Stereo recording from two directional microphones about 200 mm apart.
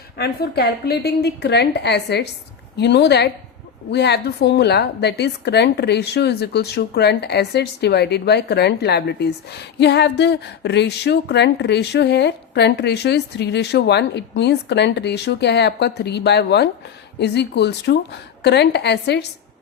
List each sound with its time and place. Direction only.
0.2 s a woman's voice: 55° left (ahead or behind)